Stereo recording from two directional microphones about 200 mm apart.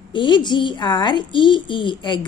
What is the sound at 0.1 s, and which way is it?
A woman's voice, 25° left (ahead or behind).